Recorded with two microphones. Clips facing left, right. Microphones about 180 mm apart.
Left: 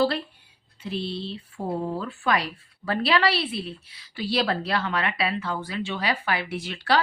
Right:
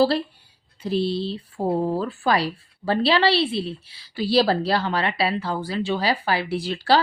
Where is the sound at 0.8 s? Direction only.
35° right (ahead or behind).